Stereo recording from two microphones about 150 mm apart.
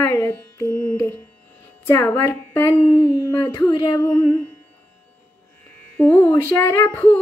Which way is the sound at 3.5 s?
30° left (ahead or behind).